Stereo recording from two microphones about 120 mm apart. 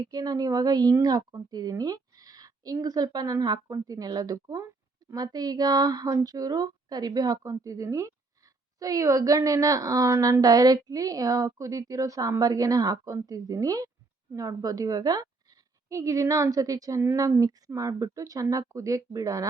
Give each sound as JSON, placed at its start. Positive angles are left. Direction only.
{"t": 0.0, "sound": "a woman's voice", "side_deg": -30}